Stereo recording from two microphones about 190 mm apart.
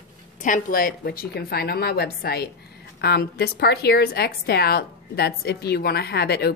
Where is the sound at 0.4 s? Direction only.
45° left (ahead or behind).